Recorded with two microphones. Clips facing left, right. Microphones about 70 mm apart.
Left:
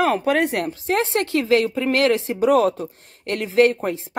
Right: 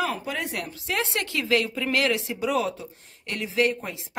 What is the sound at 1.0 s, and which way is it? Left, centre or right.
A woman's voice, left.